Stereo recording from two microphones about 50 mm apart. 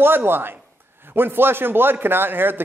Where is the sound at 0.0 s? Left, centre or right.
Right.